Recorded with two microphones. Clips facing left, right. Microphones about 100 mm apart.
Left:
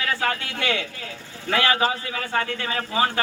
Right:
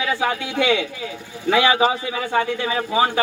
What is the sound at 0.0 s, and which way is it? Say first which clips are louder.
A man's voice: right 4 dB; 15° right (ahead or behind).